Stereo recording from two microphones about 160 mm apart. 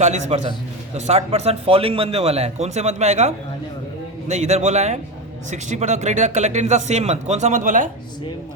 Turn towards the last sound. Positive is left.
turn(degrees=-55)  # may be behind; listen again after turning